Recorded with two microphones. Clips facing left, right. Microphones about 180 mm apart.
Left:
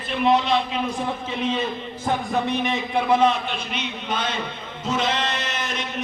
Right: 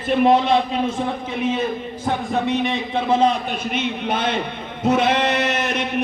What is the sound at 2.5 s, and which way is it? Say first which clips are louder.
Speech: right 3 dB; 20° right (ahead or behind).